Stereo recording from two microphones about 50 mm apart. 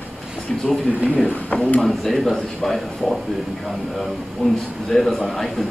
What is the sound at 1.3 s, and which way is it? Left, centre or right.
Speech, left.